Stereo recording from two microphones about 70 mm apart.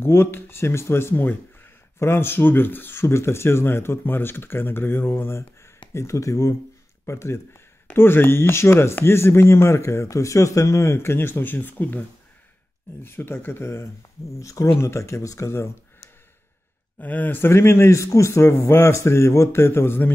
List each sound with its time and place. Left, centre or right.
0.0 s speech: left
5.9 s speech: left
13.0 s speech: left
14.4 s speech: left
17.0 s speech: left
17.5 s speech: left